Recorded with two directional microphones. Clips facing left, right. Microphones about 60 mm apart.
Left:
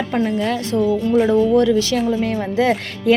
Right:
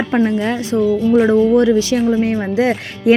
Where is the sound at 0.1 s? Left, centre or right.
Right.